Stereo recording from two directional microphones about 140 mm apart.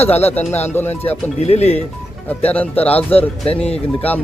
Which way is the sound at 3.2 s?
45° left (ahead or behind).